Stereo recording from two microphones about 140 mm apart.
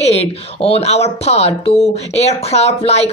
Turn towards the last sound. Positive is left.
turn(degrees=50)  # may be behind; listen again after turning